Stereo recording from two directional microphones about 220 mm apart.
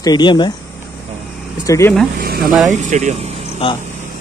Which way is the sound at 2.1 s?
45° right (ahead or behind).